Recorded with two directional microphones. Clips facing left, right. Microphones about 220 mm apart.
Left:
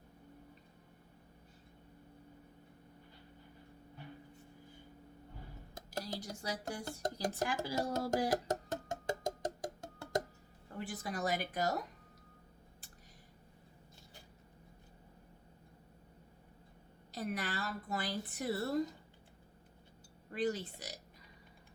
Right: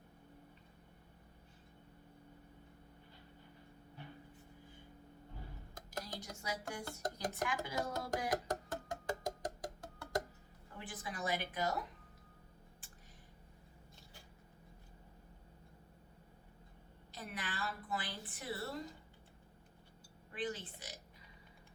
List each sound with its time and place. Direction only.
5.7 s music: 25° left (ahead or behind)
10.8 s a woman's voice: 40° left (ahead or behind)
17.2 s a woman's voice: 40° left (ahead or behind)
20.3 s a woman's voice: 40° left (ahead or behind)